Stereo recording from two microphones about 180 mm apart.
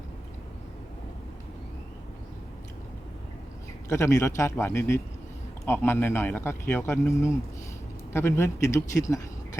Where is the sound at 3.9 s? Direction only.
15° left (ahead or behind).